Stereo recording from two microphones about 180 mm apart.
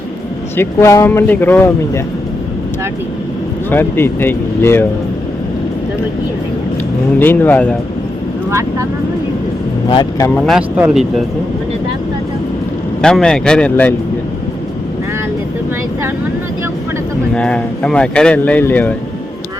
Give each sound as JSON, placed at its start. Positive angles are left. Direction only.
{"t": 0.5, "sound": "speech", "side_deg": 15}
{"t": 3.7, "sound": "speech", "side_deg": 10}
{"t": 7.2, "sound": "speech", "side_deg": 10}
{"t": 8.4, "sound": "speech", "side_deg": -15}
{"t": 9.9, "sound": "speech", "side_deg": 20}
{"t": 10.3, "sound": "speech", "side_deg": 0}
{"t": 13.0, "sound": "speech", "side_deg": 5}
{"t": 17.3, "sound": "speech", "side_deg": 5}